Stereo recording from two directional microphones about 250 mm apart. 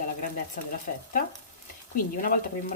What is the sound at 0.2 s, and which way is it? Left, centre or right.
Speech, left.